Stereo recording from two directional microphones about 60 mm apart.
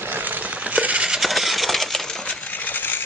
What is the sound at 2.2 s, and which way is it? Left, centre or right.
Coin, left.